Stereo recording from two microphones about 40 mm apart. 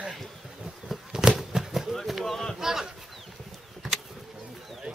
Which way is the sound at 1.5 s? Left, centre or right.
Centre.